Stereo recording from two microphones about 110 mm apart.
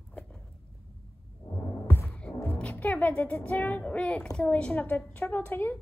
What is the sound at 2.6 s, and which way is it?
Speech, 15° left (ahead or behind).